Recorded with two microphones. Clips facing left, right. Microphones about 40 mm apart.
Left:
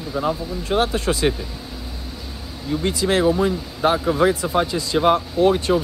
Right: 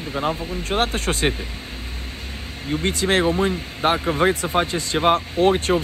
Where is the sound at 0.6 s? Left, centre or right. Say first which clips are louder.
Left 3 dB; right.